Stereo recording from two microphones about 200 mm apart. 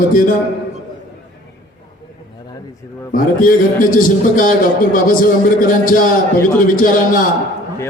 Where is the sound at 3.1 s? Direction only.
45° left (ahead or behind).